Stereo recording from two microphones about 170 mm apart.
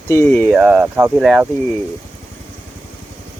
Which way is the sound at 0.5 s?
10° right (ahead or behind).